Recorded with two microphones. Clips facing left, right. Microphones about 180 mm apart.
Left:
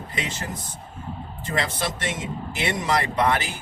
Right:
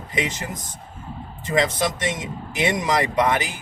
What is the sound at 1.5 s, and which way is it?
Speech, 15° right (ahead or behind).